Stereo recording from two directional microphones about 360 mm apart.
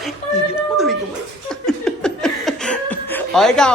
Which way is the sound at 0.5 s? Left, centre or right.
Centre.